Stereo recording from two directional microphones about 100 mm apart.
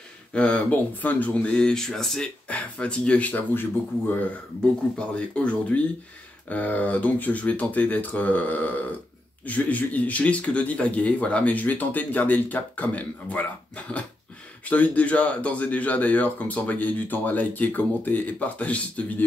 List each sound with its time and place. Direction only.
0.3 s speech: 10° left (ahead or behind)